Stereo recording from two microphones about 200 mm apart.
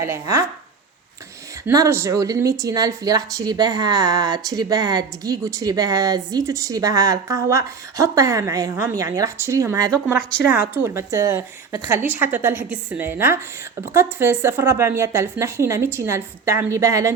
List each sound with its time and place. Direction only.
0.0 s speech: 15° right (ahead or behind)
1.6 s speech: 15° right (ahead or behind)